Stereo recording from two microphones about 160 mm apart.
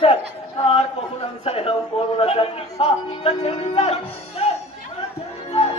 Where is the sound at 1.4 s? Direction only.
35° left (ahead or behind).